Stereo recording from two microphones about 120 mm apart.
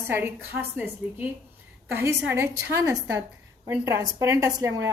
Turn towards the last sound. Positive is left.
turn(degrees=-25)  # may be behind; listen again after turning